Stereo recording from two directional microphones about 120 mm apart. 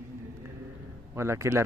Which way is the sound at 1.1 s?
20° right (ahead or behind).